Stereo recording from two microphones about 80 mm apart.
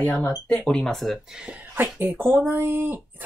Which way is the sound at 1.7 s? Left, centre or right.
Right.